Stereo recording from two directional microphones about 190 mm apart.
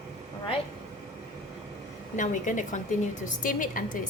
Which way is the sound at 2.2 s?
40° left (ahead or behind).